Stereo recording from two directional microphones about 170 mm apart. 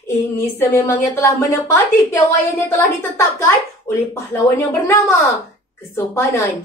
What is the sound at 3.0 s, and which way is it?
Speech, 20° left (ahead or behind).